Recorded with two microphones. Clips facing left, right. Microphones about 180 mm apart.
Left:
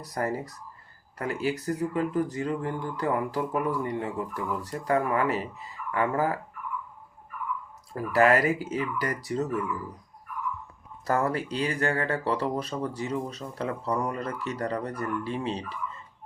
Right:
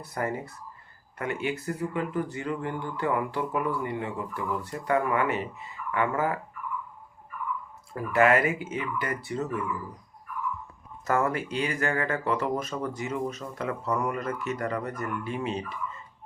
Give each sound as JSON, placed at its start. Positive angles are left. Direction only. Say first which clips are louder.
{"t": 0.0, "sound": "speech", "louder": "left 1 dB", "side_deg": 35}
{"t": 7.9, "sound": "speech", "louder": "even", "side_deg": 35}
{"t": 11.0, "sound": "speech", "louder": "even", "side_deg": 35}